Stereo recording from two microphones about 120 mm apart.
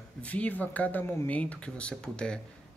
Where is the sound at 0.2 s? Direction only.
10° left (ahead or behind).